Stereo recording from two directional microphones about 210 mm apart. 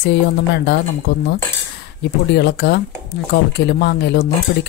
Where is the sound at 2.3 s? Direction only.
50° left (ahead or behind).